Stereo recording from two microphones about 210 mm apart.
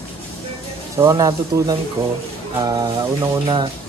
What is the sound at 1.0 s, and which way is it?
A man's voice, 15° right (ahead or behind).